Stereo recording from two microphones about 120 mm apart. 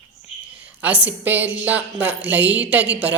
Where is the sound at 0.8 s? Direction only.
15° right (ahead or behind).